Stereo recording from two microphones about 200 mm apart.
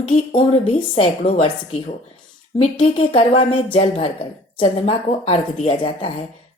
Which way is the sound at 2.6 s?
30° left (ahead or behind).